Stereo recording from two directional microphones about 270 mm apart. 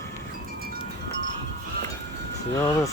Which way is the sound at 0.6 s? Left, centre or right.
Right.